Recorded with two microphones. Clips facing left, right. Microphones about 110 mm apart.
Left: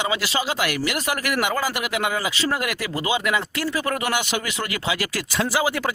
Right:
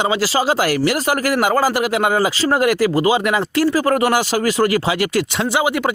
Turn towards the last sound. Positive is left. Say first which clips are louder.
# right 5 dB
turn(degrees=-20)  # may be behind; listen again after turning